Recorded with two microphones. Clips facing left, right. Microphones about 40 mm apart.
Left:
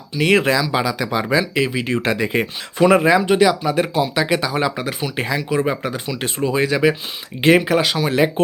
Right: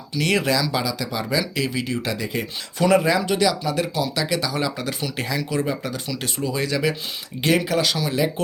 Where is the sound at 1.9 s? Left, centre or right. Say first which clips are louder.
Left 7 dB; left.